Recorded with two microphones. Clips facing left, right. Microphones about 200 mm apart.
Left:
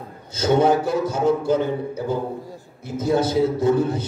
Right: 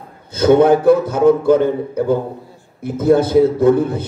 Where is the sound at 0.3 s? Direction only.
55° right (ahead or behind).